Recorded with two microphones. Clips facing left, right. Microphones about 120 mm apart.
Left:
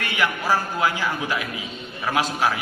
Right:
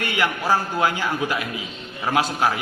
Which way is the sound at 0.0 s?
20° right (ahead or behind).